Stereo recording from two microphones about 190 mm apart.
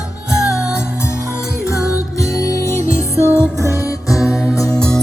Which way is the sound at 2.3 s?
15° left (ahead or behind).